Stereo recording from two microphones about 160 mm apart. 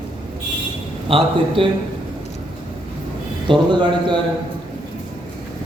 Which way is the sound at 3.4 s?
30° right (ahead or behind).